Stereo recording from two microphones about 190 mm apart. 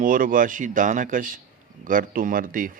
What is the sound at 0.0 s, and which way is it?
Speech, 45° right (ahead or behind).